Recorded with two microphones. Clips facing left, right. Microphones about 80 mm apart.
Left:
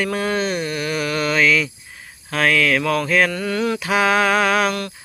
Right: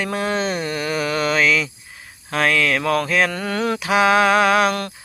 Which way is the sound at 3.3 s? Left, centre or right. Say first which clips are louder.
Left 1 dB; right.